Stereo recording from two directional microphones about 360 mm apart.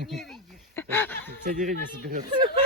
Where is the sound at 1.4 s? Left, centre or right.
Right.